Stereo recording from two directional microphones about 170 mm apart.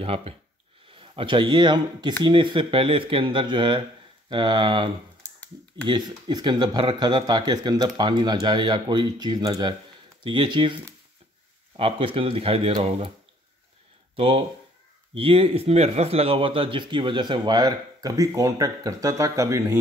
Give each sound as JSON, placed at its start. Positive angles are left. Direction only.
{"t": 0.0, "sound": "a man's voice", "side_deg": -35}
{"t": 14.1, "sound": "a man's voice", "side_deg": -35}